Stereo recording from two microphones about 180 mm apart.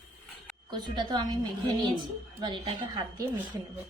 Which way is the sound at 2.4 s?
25° right (ahead or behind).